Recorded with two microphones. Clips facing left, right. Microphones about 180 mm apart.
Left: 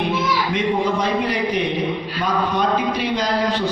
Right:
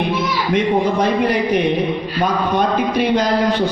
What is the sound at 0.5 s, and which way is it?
A man's voice, 50° right (ahead or behind).